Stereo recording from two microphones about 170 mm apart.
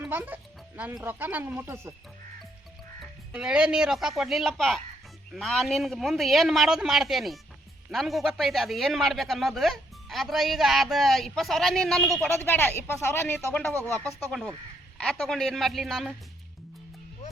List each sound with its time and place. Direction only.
0.0 s speech: 10° right (ahead or behind)
3.0 s speech: 5° right (ahead or behind)
12.4 s speech: 15° left (ahead or behind)
14.3 s speech: centre (ahead or behind)